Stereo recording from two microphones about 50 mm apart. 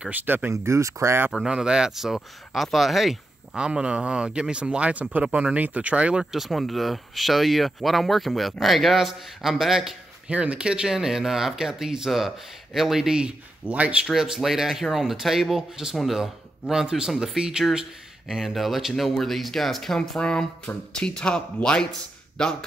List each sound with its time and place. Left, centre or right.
0.1 s speech: right
0.5 s speech: right
1.5 s speech: centre
3.5 s speech: centre
6.3 s speech: centre
10.2 s speech: right
13.7 s speech: right
14.1 s speech: centre
18.3 s speech: centre